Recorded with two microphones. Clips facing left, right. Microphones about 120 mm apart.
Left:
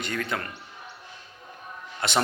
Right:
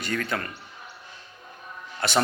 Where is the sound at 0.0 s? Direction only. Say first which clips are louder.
Right 1 dB; 15° left (ahead or behind).